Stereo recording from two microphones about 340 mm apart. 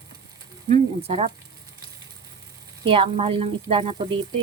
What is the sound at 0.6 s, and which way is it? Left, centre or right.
Speech, centre.